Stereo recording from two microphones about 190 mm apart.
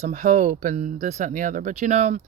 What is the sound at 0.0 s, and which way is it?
Speech, 40° right (ahead or behind).